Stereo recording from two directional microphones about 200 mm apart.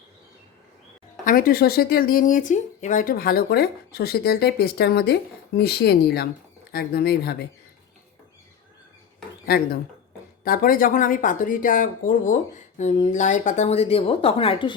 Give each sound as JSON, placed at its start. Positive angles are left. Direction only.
{"t": 1.2, "sound": "speech", "side_deg": 45}
{"t": 10.4, "sound": "speech", "side_deg": 45}